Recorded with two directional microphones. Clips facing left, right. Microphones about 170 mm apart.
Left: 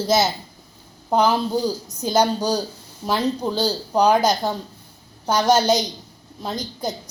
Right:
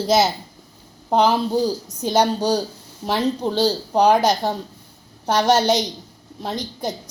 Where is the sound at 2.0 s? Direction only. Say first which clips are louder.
Right 1 dB; 30° right (ahead or behind).